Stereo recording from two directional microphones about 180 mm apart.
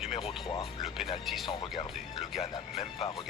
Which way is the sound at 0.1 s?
30° left (ahead or behind).